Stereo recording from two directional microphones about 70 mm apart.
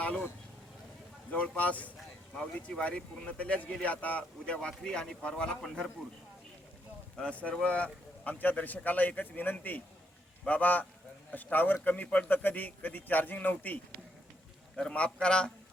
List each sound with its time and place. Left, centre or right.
1.3 s a man's voice: left
7.2 s a man's voice: centre